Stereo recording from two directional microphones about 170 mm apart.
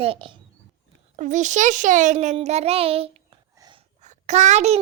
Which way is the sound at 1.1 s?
45° right (ahead or behind).